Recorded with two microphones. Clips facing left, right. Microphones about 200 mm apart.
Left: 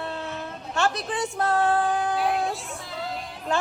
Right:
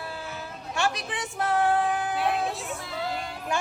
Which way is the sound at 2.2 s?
Centre (ahead or behind).